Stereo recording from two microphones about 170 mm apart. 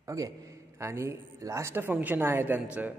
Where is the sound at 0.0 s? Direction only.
20° right (ahead or behind).